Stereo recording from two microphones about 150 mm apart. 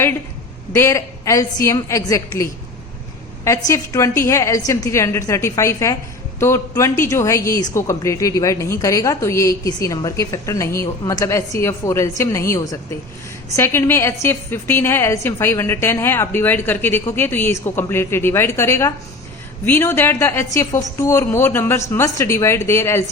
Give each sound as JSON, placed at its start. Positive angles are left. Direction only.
{"t": 0.7, "sound": "a woman's voice", "side_deg": 20}